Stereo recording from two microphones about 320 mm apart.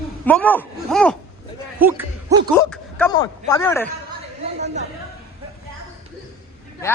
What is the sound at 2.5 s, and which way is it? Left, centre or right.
Speech, centre.